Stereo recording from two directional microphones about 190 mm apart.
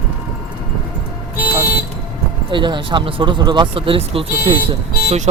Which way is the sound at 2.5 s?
25° right (ahead or behind).